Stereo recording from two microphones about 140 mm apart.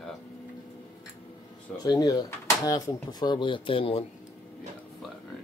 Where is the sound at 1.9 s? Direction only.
30° left (ahead or behind).